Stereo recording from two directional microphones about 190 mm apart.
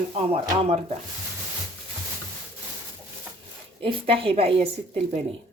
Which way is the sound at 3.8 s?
30° right (ahead or behind).